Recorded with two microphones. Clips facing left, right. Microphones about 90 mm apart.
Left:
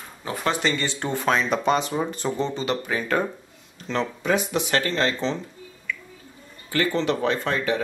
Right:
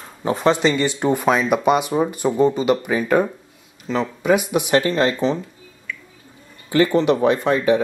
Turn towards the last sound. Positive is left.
turn(degrees=-15)  # may be behind; listen again after turning